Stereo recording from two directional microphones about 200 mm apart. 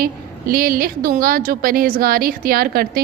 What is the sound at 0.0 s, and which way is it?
A woman's voice, 45° right (ahead or behind).